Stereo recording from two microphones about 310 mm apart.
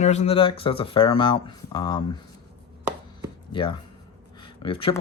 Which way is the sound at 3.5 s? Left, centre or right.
Centre.